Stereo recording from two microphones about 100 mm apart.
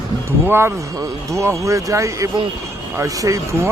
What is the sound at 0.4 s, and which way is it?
Speech, 25° right (ahead or behind).